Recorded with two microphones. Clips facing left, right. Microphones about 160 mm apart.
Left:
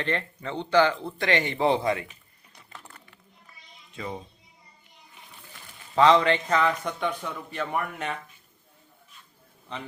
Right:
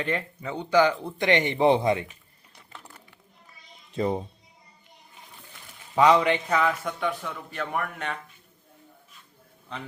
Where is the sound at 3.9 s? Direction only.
35° right (ahead or behind).